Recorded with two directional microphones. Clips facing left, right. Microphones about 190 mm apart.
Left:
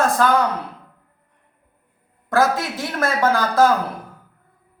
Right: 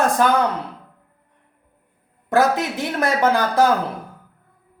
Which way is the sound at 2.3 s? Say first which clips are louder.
Right 1 dB; 20° right (ahead or behind).